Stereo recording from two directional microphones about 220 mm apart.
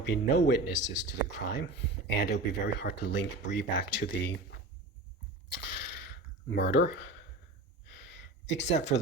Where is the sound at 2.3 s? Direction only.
45° left (ahead or behind).